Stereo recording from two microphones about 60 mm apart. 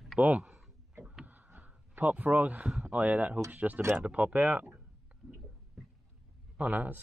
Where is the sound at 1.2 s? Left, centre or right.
Right.